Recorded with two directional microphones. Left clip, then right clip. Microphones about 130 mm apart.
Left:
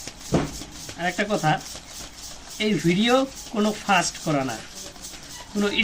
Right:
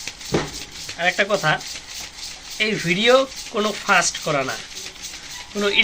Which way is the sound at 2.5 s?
20° right (ahead or behind).